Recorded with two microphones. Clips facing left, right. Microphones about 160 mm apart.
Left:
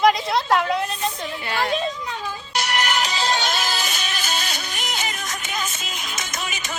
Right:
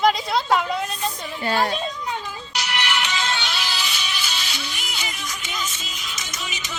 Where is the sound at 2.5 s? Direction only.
45° left (ahead or behind).